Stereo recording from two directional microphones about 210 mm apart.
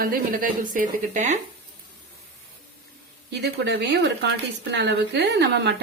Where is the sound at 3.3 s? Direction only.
50° right (ahead or behind).